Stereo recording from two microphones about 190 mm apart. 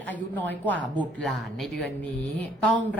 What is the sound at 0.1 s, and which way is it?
A woman's voice, 10° left (ahead or behind).